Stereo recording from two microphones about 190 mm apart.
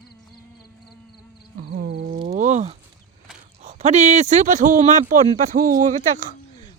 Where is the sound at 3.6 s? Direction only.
35° right (ahead or behind).